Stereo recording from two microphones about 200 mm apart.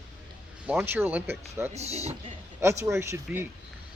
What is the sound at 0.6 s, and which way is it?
Speech, 10° right (ahead or behind).